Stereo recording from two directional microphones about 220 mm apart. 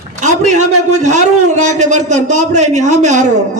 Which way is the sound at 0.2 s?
35° right (ahead or behind).